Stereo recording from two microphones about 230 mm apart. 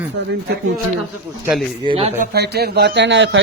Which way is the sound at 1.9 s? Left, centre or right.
Right.